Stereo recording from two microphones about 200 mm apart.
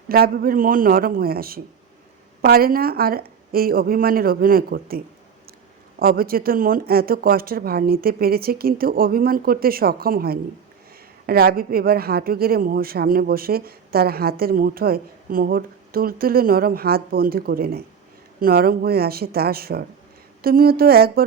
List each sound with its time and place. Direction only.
0.1 s a woman's voice: 50° right (ahead or behind)